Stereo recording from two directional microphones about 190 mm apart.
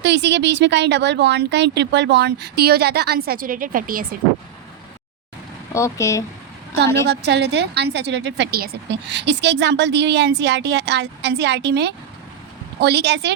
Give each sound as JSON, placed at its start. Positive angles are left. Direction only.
{"t": 0.0, "sound": "a woman's voice", "side_deg": -65}
{"t": 5.7, "sound": "speech", "side_deg": 15}
{"t": 7.1, "sound": "a woman's voice", "side_deg": -60}